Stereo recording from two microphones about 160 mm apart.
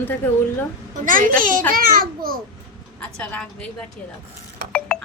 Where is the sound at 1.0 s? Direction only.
55° right (ahead or behind).